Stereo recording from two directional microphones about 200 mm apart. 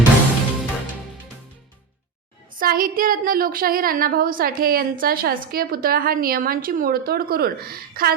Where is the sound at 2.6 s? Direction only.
45° right (ahead or behind).